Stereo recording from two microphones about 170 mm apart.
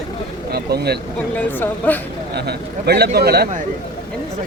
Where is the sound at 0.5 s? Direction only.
70° right (ahead or behind).